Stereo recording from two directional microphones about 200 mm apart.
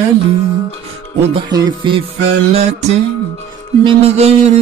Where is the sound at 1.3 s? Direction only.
20° right (ahead or behind).